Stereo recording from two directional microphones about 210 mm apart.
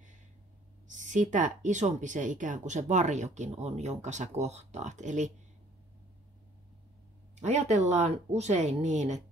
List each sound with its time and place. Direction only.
0.8 s speech: 35° right (ahead or behind)
7.3 s speech: 35° right (ahead or behind)